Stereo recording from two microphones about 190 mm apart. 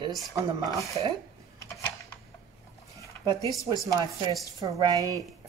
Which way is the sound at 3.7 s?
20° right (ahead or behind).